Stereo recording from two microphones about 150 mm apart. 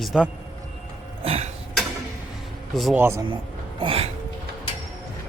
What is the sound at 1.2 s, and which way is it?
Cough, 40° right (ahead or behind).